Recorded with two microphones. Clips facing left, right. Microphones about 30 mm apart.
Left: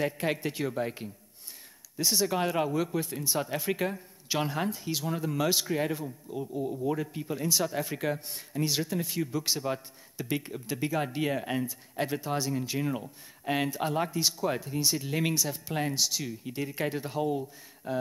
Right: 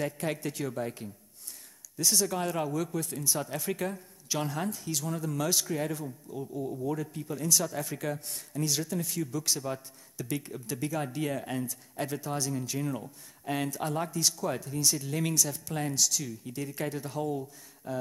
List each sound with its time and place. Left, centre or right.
0.0 s speech: left